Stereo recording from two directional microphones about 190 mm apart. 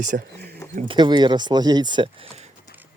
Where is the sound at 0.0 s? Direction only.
45° right (ahead or behind).